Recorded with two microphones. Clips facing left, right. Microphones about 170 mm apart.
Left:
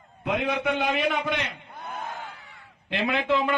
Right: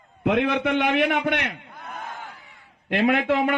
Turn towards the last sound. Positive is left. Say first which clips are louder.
# right 4 dB
turn(degrees=-60)  # may be behind; listen again after turning